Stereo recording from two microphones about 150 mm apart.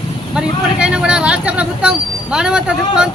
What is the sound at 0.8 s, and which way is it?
Speech, 5° right (ahead or behind).